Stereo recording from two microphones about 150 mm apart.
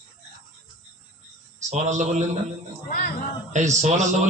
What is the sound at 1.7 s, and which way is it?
Speech, 50° right (ahead or behind).